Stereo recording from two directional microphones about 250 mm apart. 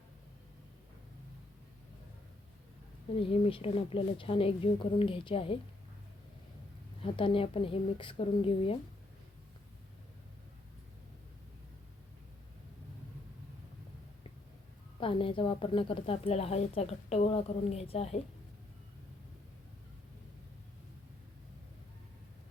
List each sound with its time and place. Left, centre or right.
3.1 s a woman's voice: left
7.0 s a woman's voice: left
15.0 s a woman's voice: left